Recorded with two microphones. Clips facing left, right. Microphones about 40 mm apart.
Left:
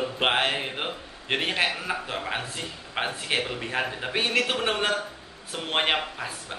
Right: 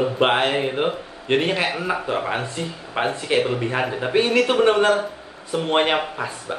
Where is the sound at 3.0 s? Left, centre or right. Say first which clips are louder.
Right 7 dB; centre.